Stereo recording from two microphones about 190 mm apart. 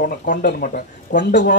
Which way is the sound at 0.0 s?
40° left (ahead or behind).